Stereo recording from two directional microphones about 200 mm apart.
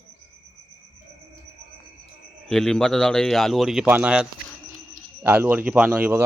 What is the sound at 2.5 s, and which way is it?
A man's voice, 5° left (ahead or behind).